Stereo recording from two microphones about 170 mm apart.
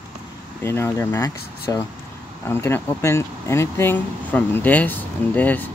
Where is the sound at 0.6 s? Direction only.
15° left (ahead or behind).